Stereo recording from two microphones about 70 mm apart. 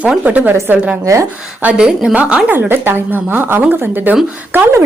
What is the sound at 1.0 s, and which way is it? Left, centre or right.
Speech, right.